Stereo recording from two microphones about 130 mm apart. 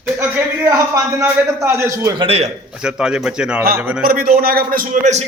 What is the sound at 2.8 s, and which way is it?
A man's voice, 5° right (ahead or behind).